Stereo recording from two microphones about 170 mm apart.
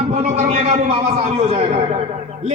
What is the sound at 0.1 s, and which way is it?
A man's voice, 40° right (ahead or behind).